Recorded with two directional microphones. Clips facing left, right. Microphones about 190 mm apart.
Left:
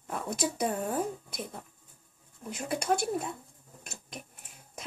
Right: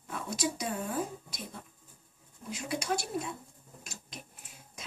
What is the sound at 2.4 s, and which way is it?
Speech, 55° left (ahead or behind).